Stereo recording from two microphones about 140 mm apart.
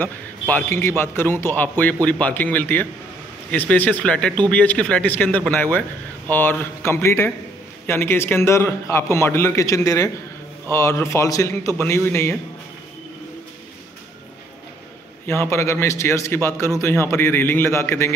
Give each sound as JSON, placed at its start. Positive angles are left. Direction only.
{"t": 0.0, "sound": "a man's voice", "side_deg": 15}
{"t": 15.2, "sound": "a man's voice", "side_deg": 15}